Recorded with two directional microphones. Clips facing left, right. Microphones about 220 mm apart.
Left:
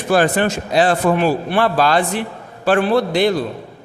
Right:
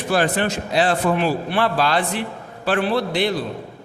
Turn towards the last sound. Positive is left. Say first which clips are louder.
# left 5 dB
turn(degrees=45)  # may be behind; listen again after turning